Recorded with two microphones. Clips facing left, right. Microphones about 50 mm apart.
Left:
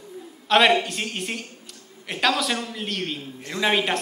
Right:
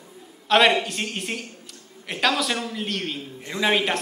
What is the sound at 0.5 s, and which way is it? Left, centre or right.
A man's voice, centre.